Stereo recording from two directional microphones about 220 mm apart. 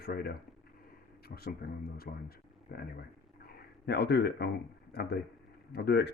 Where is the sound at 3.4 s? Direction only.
50° left (ahead or behind).